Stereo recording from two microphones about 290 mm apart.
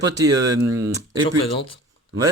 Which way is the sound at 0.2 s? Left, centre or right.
Centre.